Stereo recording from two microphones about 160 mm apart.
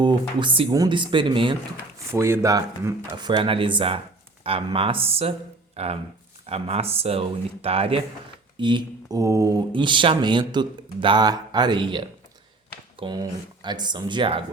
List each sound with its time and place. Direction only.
0.0 s speech: 30° right (ahead or behind)
2.1 s speech: 15° right (ahead or behind); by 14.4 s 30° right (ahead or behind)